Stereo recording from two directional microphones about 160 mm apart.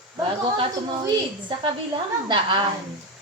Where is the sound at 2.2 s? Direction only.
30° right (ahead or behind).